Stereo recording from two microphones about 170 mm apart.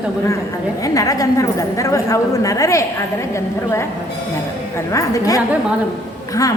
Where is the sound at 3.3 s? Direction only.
15° left (ahead or behind).